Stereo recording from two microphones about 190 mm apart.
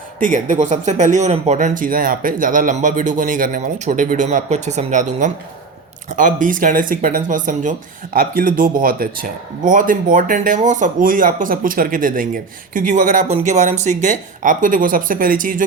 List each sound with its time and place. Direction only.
0.2 s speech: 45° right (ahead or behind)